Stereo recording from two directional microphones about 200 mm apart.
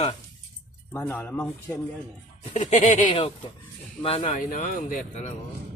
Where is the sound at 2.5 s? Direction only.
35° left (ahead or behind).